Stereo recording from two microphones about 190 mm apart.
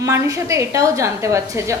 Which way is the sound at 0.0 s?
15° right (ahead or behind).